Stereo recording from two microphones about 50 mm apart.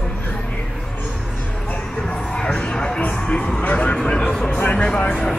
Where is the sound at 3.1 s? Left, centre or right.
Left.